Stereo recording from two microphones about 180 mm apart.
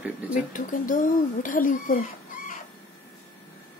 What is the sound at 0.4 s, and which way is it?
Speech, 45° left (ahead or behind).